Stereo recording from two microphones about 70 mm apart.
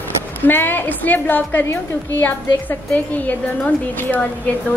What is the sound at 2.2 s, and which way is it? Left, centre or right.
A woman's voice, left.